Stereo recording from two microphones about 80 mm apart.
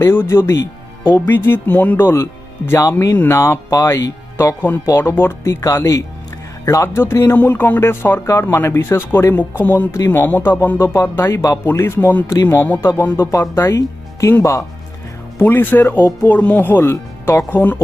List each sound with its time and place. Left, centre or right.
0.0 s speech: left
13.1 s speech: left
15.4 s speech: left
16.8 s speech: left